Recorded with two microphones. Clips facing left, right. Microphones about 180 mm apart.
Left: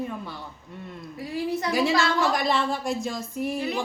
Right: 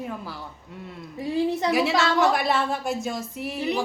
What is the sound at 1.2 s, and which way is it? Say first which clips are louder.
Speech: right 4 dB; 25° right (ahead or behind).